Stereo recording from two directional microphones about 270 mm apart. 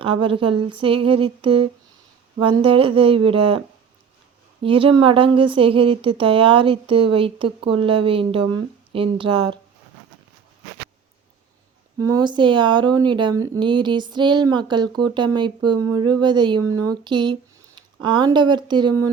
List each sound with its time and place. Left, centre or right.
0.0 s a woman's voice: centre
4.6 s a woman's voice: centre
11.9 s speech: centre
16.6 s speech: right
16.9 s speech: centre